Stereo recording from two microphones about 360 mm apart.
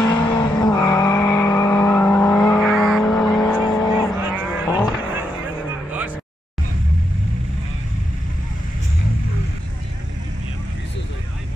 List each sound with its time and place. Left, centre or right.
0.0 s vehicle: centre